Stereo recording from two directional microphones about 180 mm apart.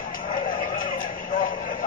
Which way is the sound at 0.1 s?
50° left (ahead or behind).